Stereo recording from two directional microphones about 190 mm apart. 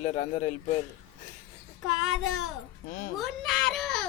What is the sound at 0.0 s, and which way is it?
Speech, 40° left (ahead or behind).